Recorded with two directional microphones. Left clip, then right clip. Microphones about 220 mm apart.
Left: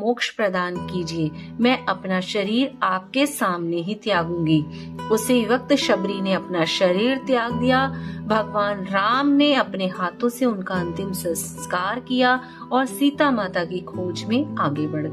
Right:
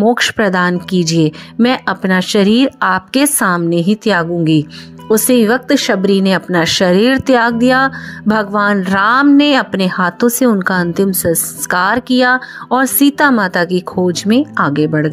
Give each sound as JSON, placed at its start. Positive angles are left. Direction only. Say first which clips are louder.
{"t": 0.0, "sound": "speech", "louder": "right 10 dB", "side_deg": -40}